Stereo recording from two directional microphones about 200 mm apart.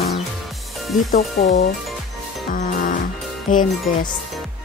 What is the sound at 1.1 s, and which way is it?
Speech, 35° left (ahead or behind).